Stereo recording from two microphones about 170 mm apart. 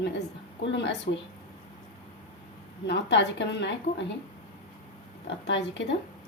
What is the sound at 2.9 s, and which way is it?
Speech, 90° left.